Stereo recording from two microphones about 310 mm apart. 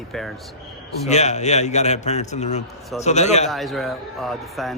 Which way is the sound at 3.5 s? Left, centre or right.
Centre.